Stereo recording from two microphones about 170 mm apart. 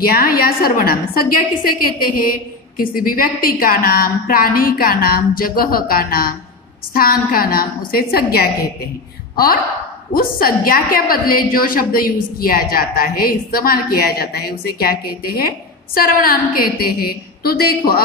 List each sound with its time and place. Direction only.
0.0 s a woman's voice: 60° left (ahead or behind)
10.1 s a woman's voice: 60° left (ahead or behind)